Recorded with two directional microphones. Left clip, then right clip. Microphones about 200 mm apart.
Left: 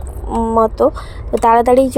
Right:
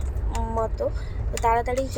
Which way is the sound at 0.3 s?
35° left (ahead or behind).